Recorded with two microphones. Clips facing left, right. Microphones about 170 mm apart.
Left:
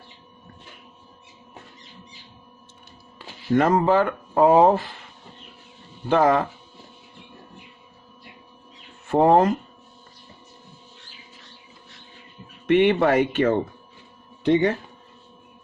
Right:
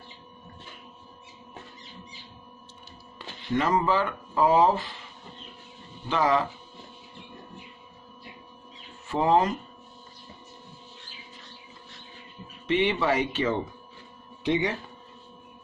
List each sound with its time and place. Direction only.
3.2 s music: 5° left (ahead or behind)
3.5 s speech: 50° left (ahead or behind)
6.1 s speech: 50° left (ahead or behind)
9.0 s speech: 55° left (ahead or behind)
12.6 s speech: 55° left (ahead or behind)